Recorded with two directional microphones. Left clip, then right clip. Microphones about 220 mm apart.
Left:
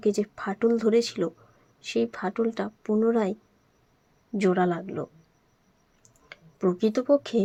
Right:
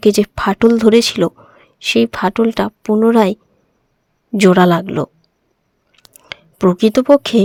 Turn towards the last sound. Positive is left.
turn(degrees=-50)  # may be behind; listen again after turning